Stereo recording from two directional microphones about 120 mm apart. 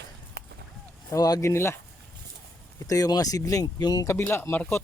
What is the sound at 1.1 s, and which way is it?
Speech, 30° left (ahead or behind).